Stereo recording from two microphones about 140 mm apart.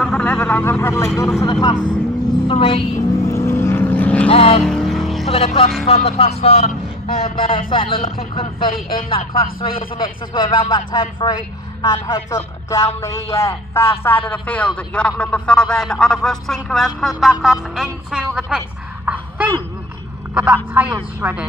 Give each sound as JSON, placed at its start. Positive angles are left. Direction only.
{"t": 0.0, "sound": "vehicle", "side_deg": 10}
{"t": 1.4, "sound": "speech", "side_deg": 30}
{"t": 2.4, "sound": "speech", "side_deg": 40}
{"t": 3.3, "sound": "vehicle", "side_deg": 20}
{"t": 4.3, "sound": "speech", "side_deg": 40}
{"t": 4.6, "sound": "vehicle", "side_deg": 0}
{"t": 5.3, "sound": "a man's voice", "side_deg": 45}
{"t": 19.0, "sound": "a sound", "side_deg": -10}
{"t": 20.3, "sound": "speech", "side_deg": -10}